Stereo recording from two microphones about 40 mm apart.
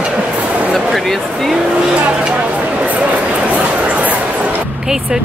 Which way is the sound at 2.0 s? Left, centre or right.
Right.